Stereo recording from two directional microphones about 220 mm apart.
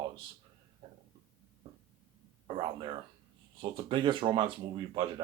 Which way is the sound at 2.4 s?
20° right (ahead or behind).